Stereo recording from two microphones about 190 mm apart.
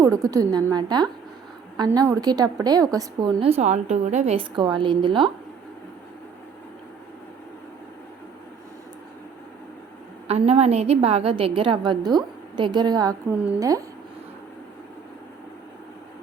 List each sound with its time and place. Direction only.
0.0 s a woman's voice: 15° right (ahead or behind)
10.2 s a woman's voice: 35° right (ahead or behind)
13.3 s a woman's voice: 10° right (ahead or behind)